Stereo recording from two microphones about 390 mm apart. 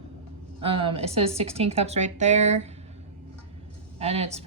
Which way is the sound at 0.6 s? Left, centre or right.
Centre.